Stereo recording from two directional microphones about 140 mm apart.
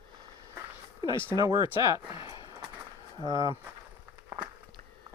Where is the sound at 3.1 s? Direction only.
25° right (ahead or behind).